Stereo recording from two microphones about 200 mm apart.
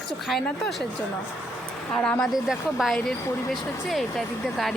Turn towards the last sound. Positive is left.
turn(degrees=0)  # may be behind; listen again after turning